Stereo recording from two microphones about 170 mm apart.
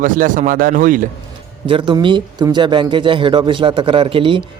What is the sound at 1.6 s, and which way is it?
Speech, 30° right (ahead or behind).